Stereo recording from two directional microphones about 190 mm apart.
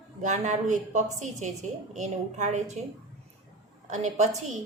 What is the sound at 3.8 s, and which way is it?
Speech, 40° right (ahead or behind).